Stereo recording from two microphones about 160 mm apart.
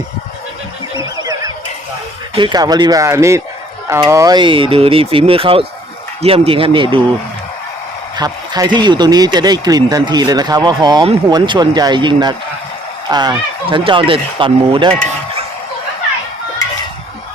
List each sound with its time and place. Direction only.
0.9 s neigh: 25° right (ahead or behind)
2.3 s speech: 30° right (ahead or behind)
8.1 s speech: 25° right (ahead or behind)